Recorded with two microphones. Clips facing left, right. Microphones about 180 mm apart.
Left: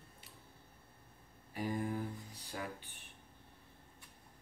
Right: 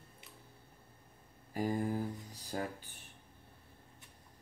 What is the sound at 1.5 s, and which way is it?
Speech, 40° right (ahead or behind).